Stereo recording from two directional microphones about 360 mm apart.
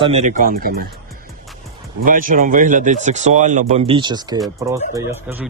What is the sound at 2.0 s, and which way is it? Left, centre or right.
Speech, right.